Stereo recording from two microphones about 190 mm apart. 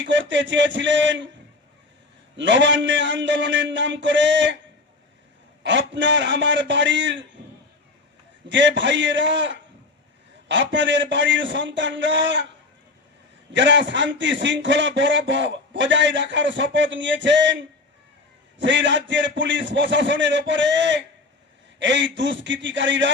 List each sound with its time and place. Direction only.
0.0 s a man's voice: 70° right (ahead or behind)
2.3 s a man's voice: 75° right (ahead or behind)
5.6 s a man's voice: 70° right (ahead or behind)
8.4 s a man's voice: 70° right (ahead or behind)
10.5 s a man's voice: 70° right (ahead or behind)
13.5 s a man's voice: 70° right (ahead or behind)
18.6 s a man's voice: 70° right (ahead or behind)